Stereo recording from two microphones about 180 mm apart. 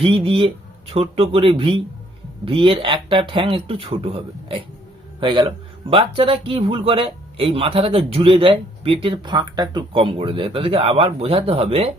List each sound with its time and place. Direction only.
0.0 s speech: 30° right (ahead or behind)